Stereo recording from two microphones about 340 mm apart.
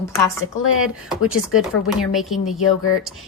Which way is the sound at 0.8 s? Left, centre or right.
Centre.